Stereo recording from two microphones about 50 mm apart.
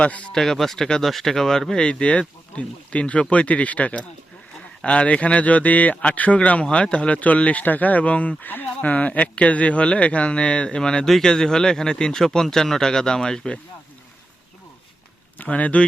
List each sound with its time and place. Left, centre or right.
0.0 s speech: left
0.3 s speech: centre; by 8.4 s left
8.4 s speech: left; by 13.6 s centre
15.4 s speech: left